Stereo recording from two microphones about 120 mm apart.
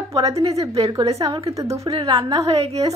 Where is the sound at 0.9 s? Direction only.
30° right (ahead or behind).